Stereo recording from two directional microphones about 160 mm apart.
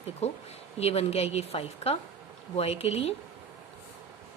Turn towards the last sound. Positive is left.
turn(degrees=40)  # may be behind; listen again after turning